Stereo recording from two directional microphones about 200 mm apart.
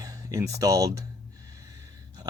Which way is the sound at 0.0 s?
20° right (ahead or behind).